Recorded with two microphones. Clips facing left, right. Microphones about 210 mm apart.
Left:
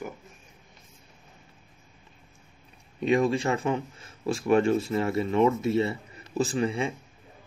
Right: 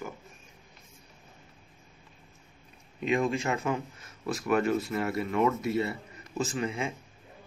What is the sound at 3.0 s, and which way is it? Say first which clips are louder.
Speech: left 4 dB; 35° left (ahead or behind).